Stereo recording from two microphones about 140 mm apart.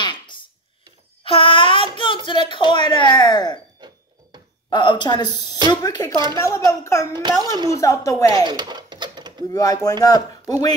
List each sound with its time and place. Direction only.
0.0 s a sound: 35° left (ahead or behind)
2.2 s speech: 35° left (ahead or behind)
4.6 s speech: 30° left (ahead or behind)
7.2 s a child's voice: 30° right (ahead or behind)
7.7 s speech: 20° left (ahead or behind)
8.5 s a sound: 30° right (ahead or behind)
9.5 s speech: 25° left (ahead or behind)